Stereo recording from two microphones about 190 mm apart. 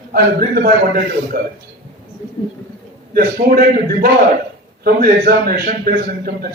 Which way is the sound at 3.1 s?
50° right (ahead or behind).